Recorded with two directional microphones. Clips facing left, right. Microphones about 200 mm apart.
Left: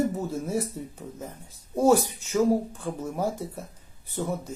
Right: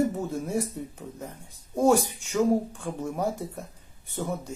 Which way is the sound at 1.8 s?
5° left (ahead or behind).